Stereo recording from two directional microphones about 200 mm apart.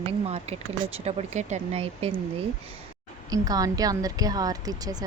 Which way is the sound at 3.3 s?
20° right (ahead or behind).